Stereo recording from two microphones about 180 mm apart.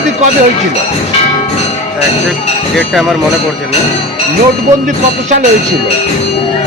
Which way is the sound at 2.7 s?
Centre (ahead or behind).